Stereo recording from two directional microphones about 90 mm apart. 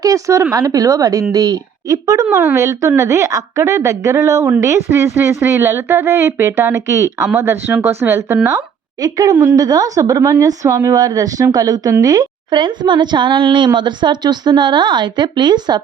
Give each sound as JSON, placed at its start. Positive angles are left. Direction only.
{"t": 0.0, "sound": "a woman's voice", "side_deg": -40}
{"t": 2.3, "sound": "a woman's voice", "side_deg": -25}
{"t": 8.4, "sound": "a woman's voice", "side_deg": -40}
{"t": 12.5, "sound": "speech", "side_deg": -60}